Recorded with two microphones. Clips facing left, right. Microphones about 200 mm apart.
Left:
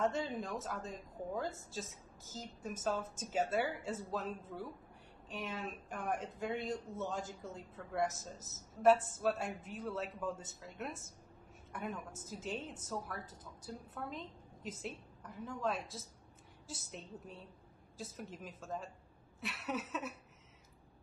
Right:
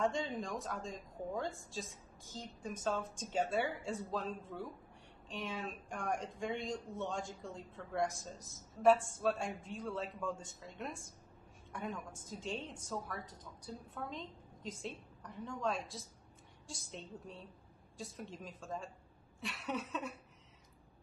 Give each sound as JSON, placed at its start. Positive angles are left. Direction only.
{"t": 0.0, "sound": "a woman's voice", "side_deg": 5}